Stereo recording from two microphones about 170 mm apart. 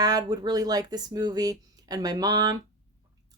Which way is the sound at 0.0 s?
20° right (ahead or behind).